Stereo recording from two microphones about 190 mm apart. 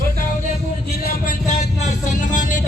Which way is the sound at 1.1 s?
50° left (ahead or behind).